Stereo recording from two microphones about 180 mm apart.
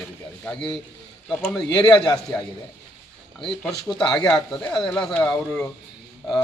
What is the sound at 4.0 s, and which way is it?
Speech, 5° left (ahead or behind).